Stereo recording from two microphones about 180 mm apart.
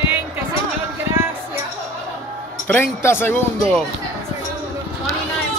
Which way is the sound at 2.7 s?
15° left (ahead or behind).